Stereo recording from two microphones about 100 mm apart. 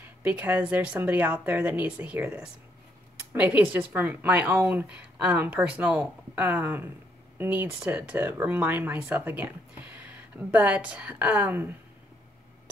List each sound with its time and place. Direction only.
0.0 s speech: 15° right (ahead or behind)